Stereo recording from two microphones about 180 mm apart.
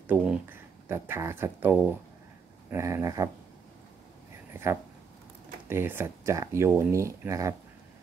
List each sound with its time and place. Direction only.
0.0 s speech: 10° right (ahead or behind)
4.6 s speech: 15° right (ahead or behind)